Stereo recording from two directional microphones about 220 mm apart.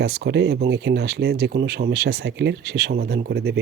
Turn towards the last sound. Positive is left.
turn(degrees=-45)  # may be behind; listen again after turning